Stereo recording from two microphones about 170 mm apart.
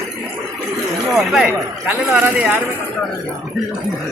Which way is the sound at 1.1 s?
Centre (ahead or behind).